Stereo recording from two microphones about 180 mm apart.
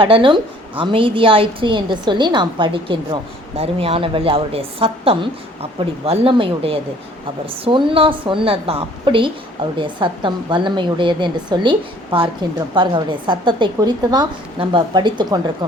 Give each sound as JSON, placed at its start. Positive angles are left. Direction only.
{"t": 0.0, "sound": "a woman's voice", "side_deg": -30}